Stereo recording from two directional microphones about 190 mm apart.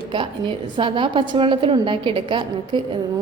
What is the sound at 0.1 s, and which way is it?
A woman's voice, 25° right (ahead or behind).